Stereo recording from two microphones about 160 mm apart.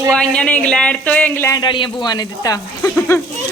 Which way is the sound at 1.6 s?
30° left (ahead or behind).